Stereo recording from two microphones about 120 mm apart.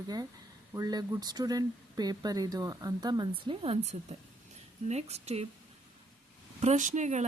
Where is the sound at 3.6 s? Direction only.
50° right (ahead or behind).